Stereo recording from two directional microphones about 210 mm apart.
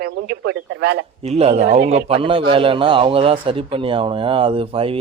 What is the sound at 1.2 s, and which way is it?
A man's voice, 30° right (ahead or behind).